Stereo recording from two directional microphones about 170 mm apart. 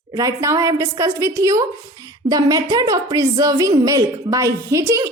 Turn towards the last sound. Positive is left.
turn(degrees=-20)  # may be behind; listen again after turning